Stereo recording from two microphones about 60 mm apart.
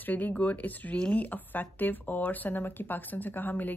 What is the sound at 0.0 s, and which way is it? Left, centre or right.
A woman's voice, left.